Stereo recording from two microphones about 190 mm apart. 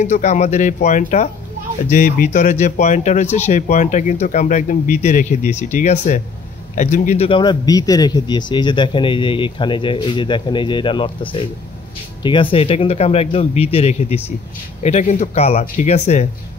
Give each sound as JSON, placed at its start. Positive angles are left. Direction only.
{"t": 0.0, "sound": "speech", "side_deg": 40}
{"t": 7.2, "sound": "speech", "side_deg": 25}